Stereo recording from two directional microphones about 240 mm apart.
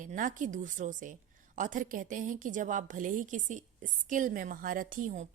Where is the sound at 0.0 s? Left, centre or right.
Right.